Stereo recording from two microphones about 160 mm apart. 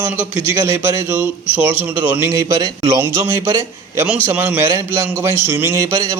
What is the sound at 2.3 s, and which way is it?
A man's voice, 20° right (ahead or behind).